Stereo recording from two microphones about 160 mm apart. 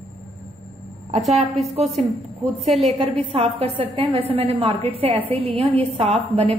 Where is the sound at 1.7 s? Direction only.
40° right (ahead or behind).